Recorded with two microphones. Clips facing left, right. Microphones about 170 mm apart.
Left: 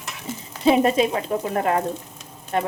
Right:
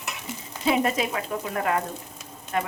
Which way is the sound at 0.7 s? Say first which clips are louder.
Left 6 dB; 30° left (ahead or behind).